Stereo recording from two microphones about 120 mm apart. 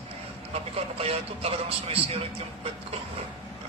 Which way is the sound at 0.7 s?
60° right (ahead or behind).